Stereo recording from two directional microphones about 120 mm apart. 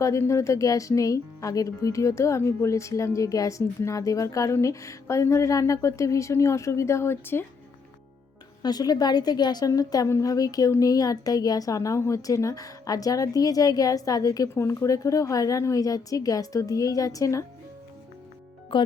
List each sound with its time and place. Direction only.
0.0 s a woman's voice: 25° left (ahead or behind)
8.6 s a woman's voice: 35° left (ahead or behind)
18.7 s speech: 45° left (ahead or behind)